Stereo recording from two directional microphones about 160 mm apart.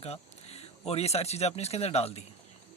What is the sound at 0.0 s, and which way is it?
A man's voice, 40° left (ahead or behind).